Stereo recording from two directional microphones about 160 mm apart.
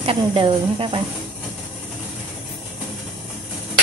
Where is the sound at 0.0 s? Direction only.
35° right (ahead or behind).